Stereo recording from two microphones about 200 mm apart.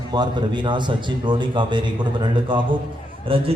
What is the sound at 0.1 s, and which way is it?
A man's voice, 20° right (ahead or behind).